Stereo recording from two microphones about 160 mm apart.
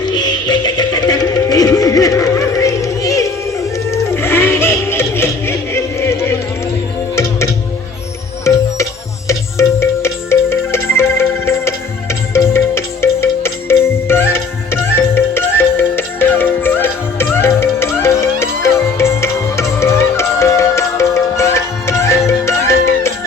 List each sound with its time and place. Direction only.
0.0 s music: 25° left (ahead or behind)
8.4 s music: 20° left (ahead or behind)